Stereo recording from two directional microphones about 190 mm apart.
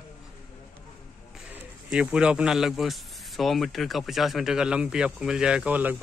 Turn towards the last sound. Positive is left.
turn(degrees=-10)  # may be behind; listen again after turning